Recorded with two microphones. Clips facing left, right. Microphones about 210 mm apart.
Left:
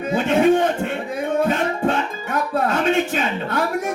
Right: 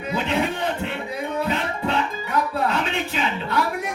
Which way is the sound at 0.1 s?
45° left (ahead or behind).